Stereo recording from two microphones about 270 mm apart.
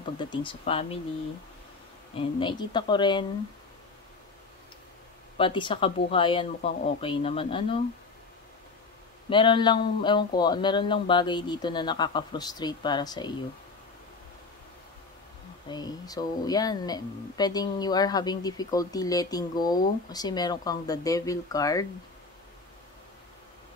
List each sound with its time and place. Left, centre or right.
0.2 s speech: centre
2.1 s speech: centre
5.4 s speech: centre
9.3 s speech: centre
15.7 s speech: centre